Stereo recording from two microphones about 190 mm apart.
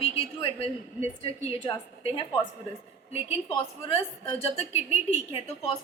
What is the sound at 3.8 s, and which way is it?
A woman's voice, 30° left (ahead or behind).